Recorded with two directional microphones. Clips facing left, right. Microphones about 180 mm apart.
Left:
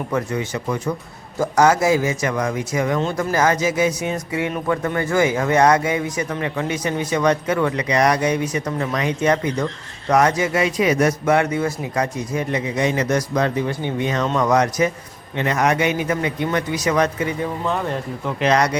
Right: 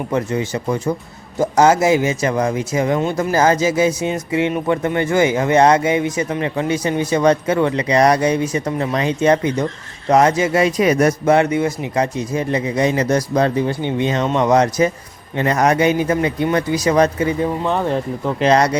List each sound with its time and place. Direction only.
0.1 s speech: 25° right (ahead or behind); by 11.1 s 40° right (ahead or behind)
11.3 s a man's voice: 25° right (ahead or behind)
18.3 s a man's voice: 30° right (ahead or behind)